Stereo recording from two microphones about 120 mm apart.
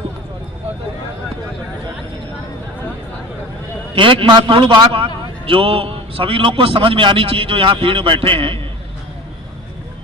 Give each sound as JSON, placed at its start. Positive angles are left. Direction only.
{"t": 3.9, "sound": "a man's voice", "side_deg": -45}